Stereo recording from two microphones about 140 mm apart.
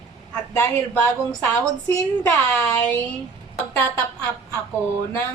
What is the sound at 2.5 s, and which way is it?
A woman's voice, 15° left (ahead or behind).